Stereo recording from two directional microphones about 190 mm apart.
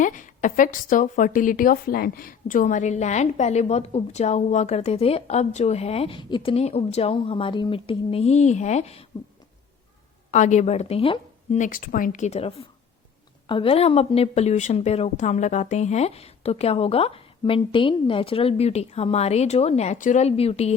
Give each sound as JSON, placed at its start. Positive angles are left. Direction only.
{"t": 0.0, "sound": "a woman's voice", "side_deg": 40}
{"t": 10.3, "sound": "a woman's voice", "side_deg": 40}
{"t": 11.5, "sound": "a woman's voice", "side_deg": 45}